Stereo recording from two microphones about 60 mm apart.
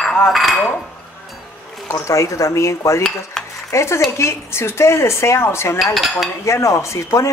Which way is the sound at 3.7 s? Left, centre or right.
Left.